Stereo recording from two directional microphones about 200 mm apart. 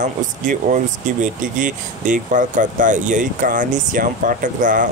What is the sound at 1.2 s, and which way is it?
Speech, 40° right (ahead or behind).